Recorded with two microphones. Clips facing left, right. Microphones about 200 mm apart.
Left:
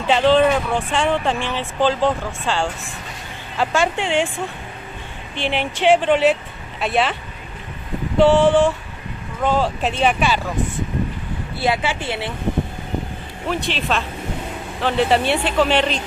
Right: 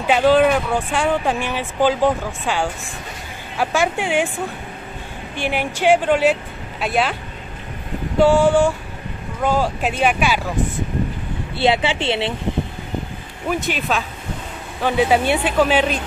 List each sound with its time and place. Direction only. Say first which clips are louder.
0.0 s speech: right 1 dB; 10° right (ahead or behind)
5.3 s speech: even; 10° right (ahead or behind)
8.2 s speech: even; 10° right (ahead or behind)
11.5 s speech: right 3 dB; 25° right (ahead or behind)
13.7 s speech: even; 5° right (ahead or behind)